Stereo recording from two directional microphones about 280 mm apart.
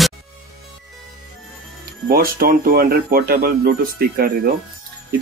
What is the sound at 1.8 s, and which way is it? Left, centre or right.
Speech, right.